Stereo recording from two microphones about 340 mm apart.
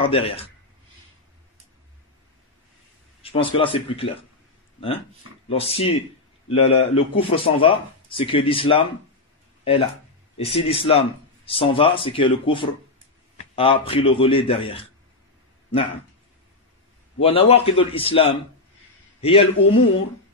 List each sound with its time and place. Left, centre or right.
0.0 s speech: centre
3.2 s speech: centre
10.3 s speech: centre
17.2 s speech: centre